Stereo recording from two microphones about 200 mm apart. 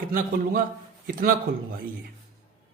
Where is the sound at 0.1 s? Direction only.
40° right (ahead or behind).